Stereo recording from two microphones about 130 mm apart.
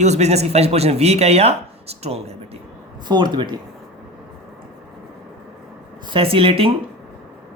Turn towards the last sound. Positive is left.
turn(degrees=-45)  # may be behind; listen again after turning